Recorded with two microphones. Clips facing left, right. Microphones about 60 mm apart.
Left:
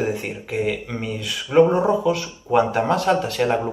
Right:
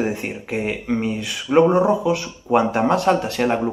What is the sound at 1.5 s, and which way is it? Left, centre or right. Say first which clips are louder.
Speech: right 1 dB; centre.